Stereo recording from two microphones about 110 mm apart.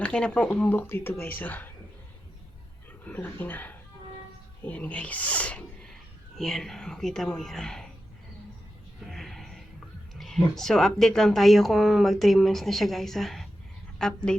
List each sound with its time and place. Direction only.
0.0 s speech: 10° left (ahead or behind)
3.0 s speech: 15° left (ahead or behind)
9.0 s music: centre (ahead or behind)
10.2 s speech: centre (ahead or behind)